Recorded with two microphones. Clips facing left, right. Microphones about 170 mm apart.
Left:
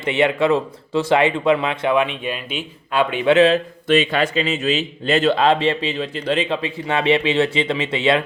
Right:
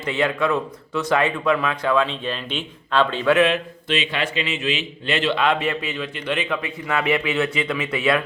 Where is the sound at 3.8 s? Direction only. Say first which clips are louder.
Left 8 dB; 50° left (ahead or behind).